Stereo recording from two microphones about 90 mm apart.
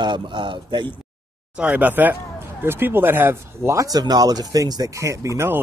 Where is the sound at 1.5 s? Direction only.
15° right (ahead or behind).